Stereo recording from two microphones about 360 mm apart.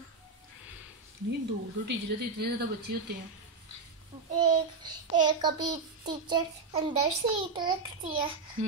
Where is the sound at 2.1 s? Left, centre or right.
Right.